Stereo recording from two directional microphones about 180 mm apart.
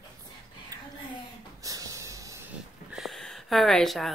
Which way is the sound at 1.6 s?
20° right (ahead or behind).